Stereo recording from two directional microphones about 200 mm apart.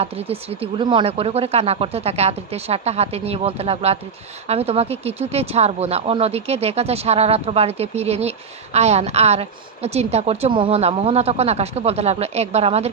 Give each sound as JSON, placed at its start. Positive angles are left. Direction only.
{"t": 0.0, "sound": "speech", "side_deg": -30}